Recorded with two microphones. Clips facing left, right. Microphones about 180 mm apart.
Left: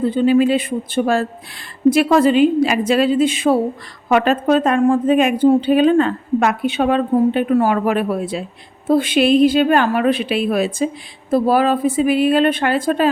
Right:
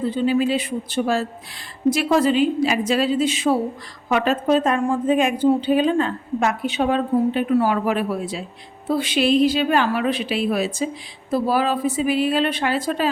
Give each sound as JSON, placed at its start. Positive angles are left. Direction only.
{"t": 0.0, "sound": "a woman's voice", "side_deg": 55}